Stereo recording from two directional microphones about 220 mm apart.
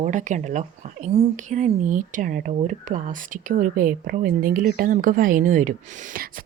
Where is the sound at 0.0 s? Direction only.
35° right (ahead or behind).